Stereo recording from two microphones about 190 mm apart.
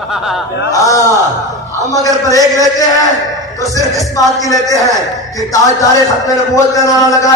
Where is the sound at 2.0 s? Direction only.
20° left (ahead or behind).